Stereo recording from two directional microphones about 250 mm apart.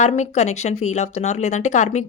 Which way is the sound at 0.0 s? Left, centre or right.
Left.